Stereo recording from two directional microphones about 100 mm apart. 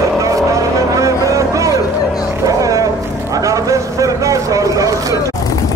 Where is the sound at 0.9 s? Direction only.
35° right (ahead or behind).